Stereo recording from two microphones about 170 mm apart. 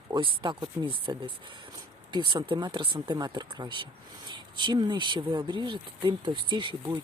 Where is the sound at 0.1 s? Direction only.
30° right (ahead or behind).